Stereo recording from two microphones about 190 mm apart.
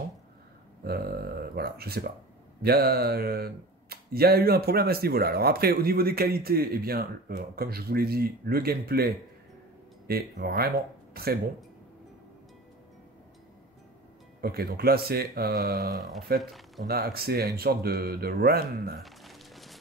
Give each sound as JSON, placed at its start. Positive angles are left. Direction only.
{"t": 0.8, "sound": "speech", "side_deg": -55}
{"t": 14.4, "sound": "speech", "side_deg": -55}
{"t": 18.9, "sound": "a sound", "side_deg": 0}